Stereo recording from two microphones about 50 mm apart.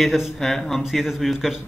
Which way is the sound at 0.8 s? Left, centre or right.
Centre.